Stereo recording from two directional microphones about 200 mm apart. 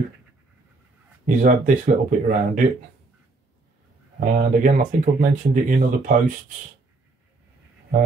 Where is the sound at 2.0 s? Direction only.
40° right (ahead or behind).